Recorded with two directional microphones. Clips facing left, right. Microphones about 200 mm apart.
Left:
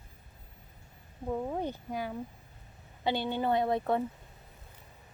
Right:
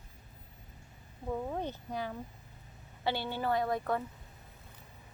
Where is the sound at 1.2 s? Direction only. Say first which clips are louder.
Left 3 dB; 10° left (ahead or behind); by 4.1 s 25° left (ahead or behind).